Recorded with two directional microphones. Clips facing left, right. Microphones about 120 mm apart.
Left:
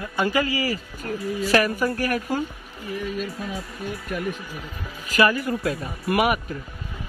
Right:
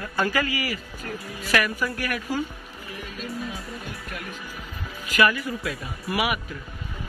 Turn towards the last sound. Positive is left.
turn(degrees=45)  # may be behind; listen again after turning